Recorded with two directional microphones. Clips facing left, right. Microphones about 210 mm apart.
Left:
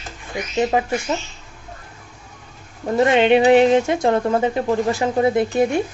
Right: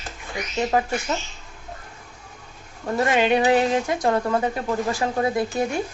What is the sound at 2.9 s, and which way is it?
Speech, 25° left (ahead or behind).